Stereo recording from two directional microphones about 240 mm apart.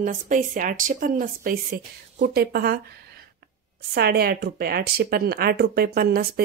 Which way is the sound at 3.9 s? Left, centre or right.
Right.